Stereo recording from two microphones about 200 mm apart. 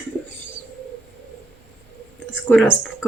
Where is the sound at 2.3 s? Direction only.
10° left (ahead or behind).